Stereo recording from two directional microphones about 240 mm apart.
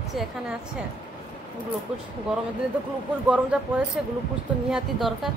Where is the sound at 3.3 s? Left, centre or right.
Centre.